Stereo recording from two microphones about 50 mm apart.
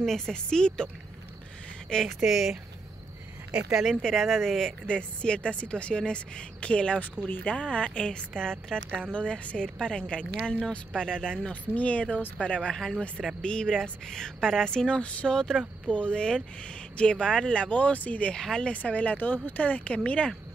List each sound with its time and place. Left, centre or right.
0.0 s speech: centre
1.9 s speech: centre
2.2 s speech: centre
3.5 s speech: centre
4.0 s speech: centre
4.8 s a woman's voice: centre
11.7 s a woman's voice: left
18.3 s speech: centre
18.7 s speech: left